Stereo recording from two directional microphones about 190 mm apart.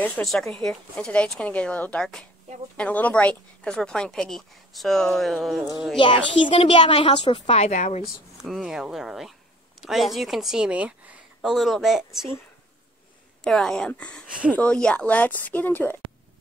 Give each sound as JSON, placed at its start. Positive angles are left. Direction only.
{"t": 0.0, "sound": "a woman's voice", "side_deg": 5}
{"t": 6.4, "sound": "a woman's voice", "side_deg": 30}
{"t": 8.5, "sound": "a woman's voice", "side_deg": 0}
{"t": 13.4, "sound": "a woman's voice", "side_deg": 0}